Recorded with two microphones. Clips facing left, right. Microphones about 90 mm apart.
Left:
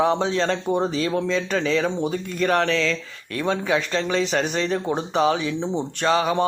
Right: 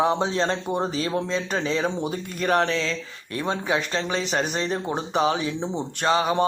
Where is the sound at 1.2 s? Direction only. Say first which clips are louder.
Left 3 dB; 35° right (ahead or behind).